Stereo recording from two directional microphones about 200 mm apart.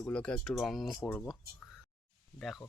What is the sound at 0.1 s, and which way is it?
Speech, 5° left (ahead or behind).